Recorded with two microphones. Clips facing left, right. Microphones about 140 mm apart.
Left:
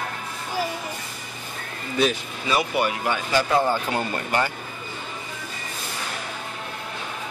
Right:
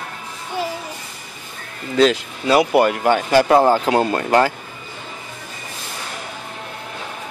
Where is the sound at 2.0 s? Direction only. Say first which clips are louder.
Right 7 dB; 85° right.